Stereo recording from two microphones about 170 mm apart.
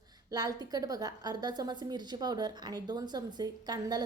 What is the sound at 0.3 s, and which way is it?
A woman's voice, 25° right (ahead or behind).